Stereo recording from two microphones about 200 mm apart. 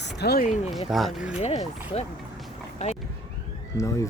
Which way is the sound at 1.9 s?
30° left (ahead or behind).